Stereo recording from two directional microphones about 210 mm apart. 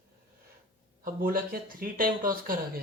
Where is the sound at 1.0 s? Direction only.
45° right (ahead or behind).